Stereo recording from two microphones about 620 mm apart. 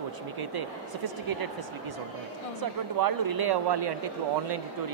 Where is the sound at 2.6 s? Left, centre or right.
Right.